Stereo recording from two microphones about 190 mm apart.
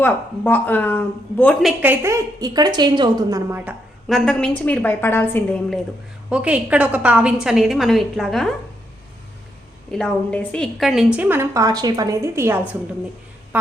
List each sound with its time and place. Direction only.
0.0 s speech: 10° left (ahead or behind)
1.8 s a woman's voice: 10° right (ahead or behind)
4.1 s speech: 5° left (ahead or behind)
6.3 s a woman's voice: 5° right (ahead or behind)
9.9 s a woman's voice: 5° left (ahead or behind); by 12.6 s 10° right (ahead or behind)